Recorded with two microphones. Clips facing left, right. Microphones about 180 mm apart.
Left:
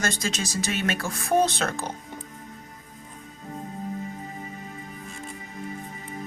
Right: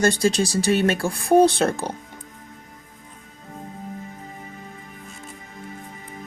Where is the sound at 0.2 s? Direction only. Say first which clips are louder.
Right 9 dB; 30° right (ahead or behind).